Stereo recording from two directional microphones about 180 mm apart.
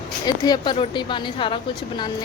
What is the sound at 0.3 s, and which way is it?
A woman's voice, 20° left (ahead or behind).